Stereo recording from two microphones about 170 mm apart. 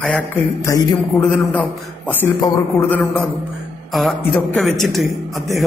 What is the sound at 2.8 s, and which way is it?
A man's voice, 10° left (ahead or behind).